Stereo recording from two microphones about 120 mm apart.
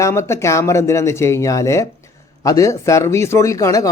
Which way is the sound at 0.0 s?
25° left (ahead or behind).